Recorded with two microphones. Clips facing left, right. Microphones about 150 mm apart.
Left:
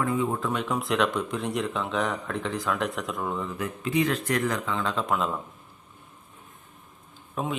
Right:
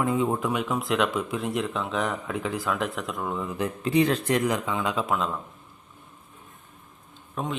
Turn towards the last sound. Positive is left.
turn(degrees=5)  # may be behind; listen again after turning